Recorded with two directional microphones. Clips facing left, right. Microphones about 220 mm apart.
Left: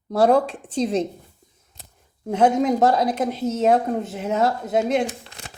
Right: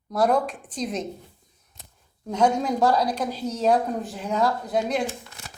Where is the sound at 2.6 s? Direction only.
20° left (ahead or behind).